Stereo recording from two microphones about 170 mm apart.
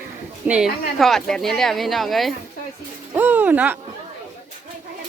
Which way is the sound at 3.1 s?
10° right (ahead or behind).